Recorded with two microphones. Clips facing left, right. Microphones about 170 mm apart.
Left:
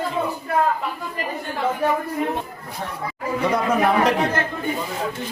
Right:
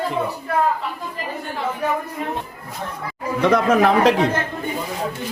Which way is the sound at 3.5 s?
90° right.